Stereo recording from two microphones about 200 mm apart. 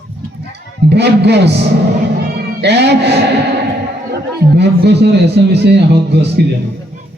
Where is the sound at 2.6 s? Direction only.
55° right (ahead or behind).